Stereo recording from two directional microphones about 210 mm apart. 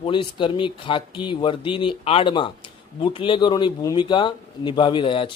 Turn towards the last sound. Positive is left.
turn(degrees=25)  # may be behind; listen again after turning